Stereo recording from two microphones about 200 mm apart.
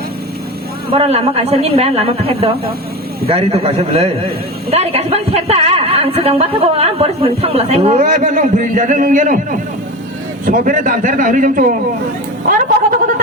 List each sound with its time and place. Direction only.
0.9 s a woman's voice: 30° right (ahead or behind)